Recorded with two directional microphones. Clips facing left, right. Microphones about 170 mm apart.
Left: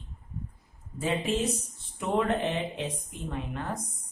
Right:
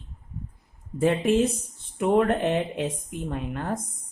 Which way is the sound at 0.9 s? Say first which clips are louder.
Right 7 dB; 55° right (ahead or behind).